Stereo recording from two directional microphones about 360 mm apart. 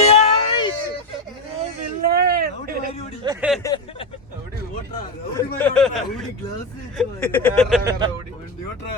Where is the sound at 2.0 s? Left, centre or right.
Right.